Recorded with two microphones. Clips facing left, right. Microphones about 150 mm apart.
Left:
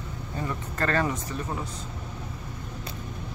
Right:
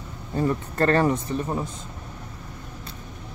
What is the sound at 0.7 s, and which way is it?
Speech, 35° right (ahead or behind).